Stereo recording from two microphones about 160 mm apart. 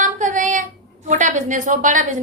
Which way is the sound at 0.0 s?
55° right (ahead or behind).